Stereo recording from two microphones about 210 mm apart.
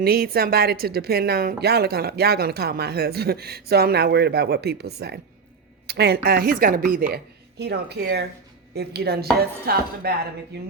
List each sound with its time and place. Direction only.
0.0 s speech: 45° right (ahead or behind)